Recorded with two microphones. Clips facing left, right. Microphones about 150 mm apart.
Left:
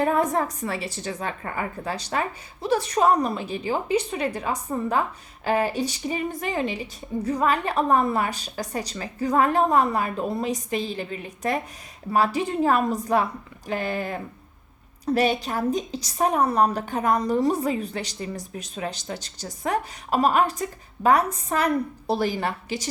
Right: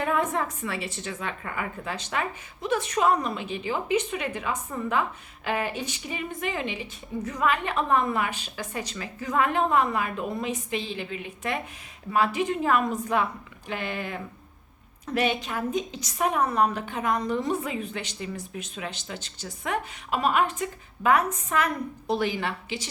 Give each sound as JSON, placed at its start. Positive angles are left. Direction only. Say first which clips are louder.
{"t": 0.0, "sound": "a woman's voice", "louder": "left 4 dB", "side_deg": 35}